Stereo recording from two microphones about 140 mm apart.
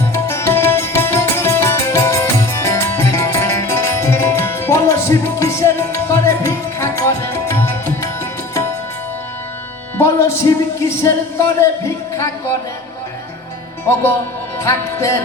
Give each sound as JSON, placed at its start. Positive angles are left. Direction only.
{"t": 0.1, "sound": "music", "side_deg": 20}
{"t": 10.0, "sound": "speech", "side_deg": 20}
{"t": 14.6, "sound": "music", "side_deg": 20}